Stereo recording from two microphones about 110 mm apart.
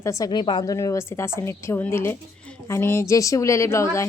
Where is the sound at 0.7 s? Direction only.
30° left (ahead or behind).